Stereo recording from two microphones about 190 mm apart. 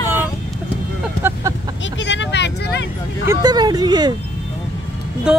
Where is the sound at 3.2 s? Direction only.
20° right (ahead or behind).